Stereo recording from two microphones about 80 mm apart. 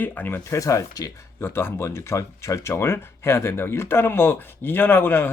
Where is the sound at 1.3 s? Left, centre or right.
Left.